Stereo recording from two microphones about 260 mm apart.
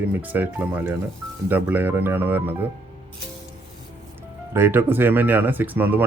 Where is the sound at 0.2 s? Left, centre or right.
Centre.